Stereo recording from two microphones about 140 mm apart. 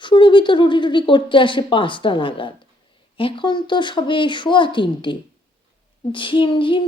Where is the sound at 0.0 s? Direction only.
35° left (ahead or behind).